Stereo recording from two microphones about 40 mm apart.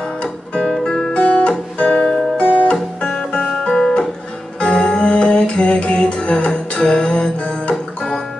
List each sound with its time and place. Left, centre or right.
0.2 s music: centre
1.1 s guitar: left
1.8 s music: left
2.3 s music: left
7.7 s music: centre